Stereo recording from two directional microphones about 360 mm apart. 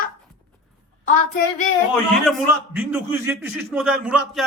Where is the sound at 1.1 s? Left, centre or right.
Left.